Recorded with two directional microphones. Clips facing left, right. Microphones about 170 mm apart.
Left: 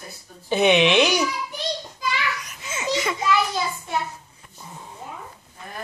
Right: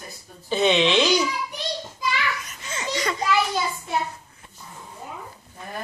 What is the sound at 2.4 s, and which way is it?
Baby laughter, 5° left (ahead or behind).